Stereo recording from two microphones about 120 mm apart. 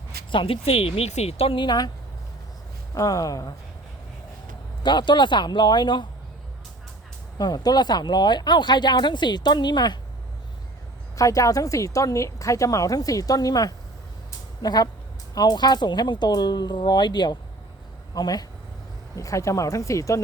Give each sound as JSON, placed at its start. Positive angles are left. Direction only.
{"t": 0.3, "sound": "speech", "side_deg": 45}
{"t": 2.9, "sound": "a woman's voice", "side_deg": 30}
{"t": 4.8, "sound": "speech", "side_deg": 40}
{"t": 7.3, "sound": "speech", "side_deg": 35}
{"t": 11.2, "sound": "a woman's voice", "side_deg": 25}